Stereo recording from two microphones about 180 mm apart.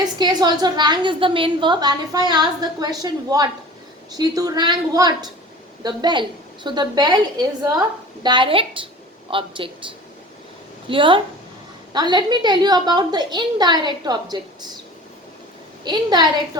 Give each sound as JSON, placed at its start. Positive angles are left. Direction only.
{"t": 0.0, "sound": "a woman's voice", "side_deg": -25}
{"t": 15.8, "sound": "a woman's voice", "side_deg": -25}